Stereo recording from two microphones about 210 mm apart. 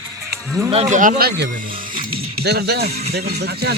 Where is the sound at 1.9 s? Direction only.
25° right (ahead or behind).